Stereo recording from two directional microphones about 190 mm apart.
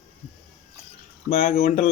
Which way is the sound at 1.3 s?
45° left (ahead or behind).